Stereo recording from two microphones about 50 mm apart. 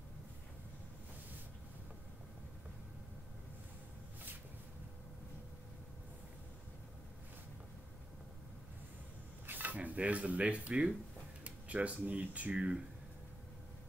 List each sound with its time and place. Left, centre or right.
9.5 s rub: right
11.4 s speech: right
12.5 s speech: centre